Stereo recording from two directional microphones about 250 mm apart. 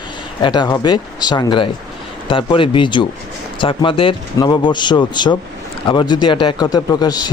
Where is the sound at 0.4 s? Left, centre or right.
Centre.